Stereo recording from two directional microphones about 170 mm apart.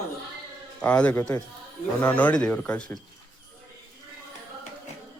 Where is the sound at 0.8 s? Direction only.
10° left (ahead or behind).